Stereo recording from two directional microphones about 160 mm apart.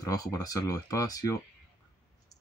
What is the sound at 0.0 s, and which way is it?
Speech, 20° left (ahead or behind).